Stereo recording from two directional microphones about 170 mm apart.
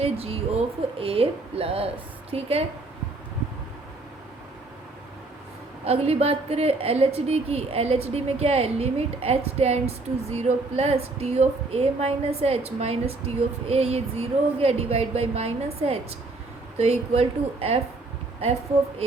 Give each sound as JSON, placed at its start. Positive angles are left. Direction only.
{"t": 0.0, "sound": "a woman's voice", "side_deg": -35}
{"t": 5.8, "sound": "a woman's voice", "side_deg": -35}